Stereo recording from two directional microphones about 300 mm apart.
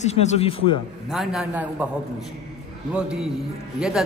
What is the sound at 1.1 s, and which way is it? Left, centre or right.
Speech, centre.